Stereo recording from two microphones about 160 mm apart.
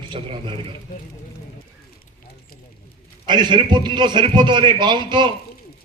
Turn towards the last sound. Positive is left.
turn(degrees=-30)  # may be behind; listen again after turning